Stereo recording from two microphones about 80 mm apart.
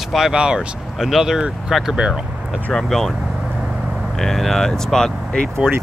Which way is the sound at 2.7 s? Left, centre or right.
Centre.